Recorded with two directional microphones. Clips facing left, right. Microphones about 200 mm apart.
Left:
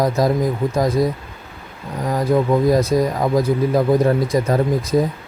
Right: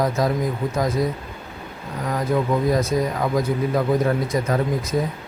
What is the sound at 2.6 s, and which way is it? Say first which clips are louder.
Speech: left 4 dB; 35° left (ahead or behind).